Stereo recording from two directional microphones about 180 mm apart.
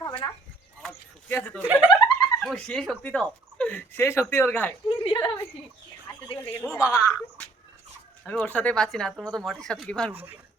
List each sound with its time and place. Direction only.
0.0 s a sound: 30° left (ahead or behind)
0.8 s a sound: 10° left (ahead or behind)
1.6 s speech: 10° right (ahead or behind)
2.4 s speech: 5° left (ahead or behind)
4.9 s a woman's voice: 30° left (ahead or behind)
6.4 s speech: 10° left (ahead or behind)
10.1 s speech: 10° right (ahead or behind)